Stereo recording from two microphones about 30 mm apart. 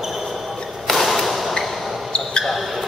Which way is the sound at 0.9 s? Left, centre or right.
Centre.